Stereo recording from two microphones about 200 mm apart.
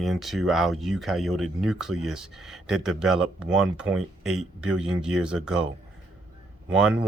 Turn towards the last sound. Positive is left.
turn(degrees=-5)  # may be behind; listen again after turning